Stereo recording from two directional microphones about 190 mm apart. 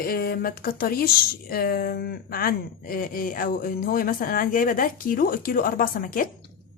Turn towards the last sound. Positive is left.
turn(degrees=50)  # may be behind; listen again after turning